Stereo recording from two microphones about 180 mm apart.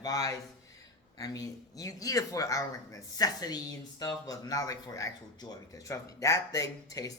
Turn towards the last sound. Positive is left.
turn(degrees=20)  # may be behind; listen again after turning